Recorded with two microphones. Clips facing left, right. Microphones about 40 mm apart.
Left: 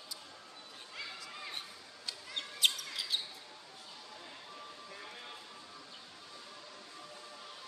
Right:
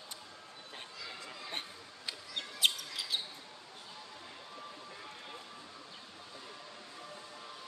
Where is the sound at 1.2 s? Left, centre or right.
Right.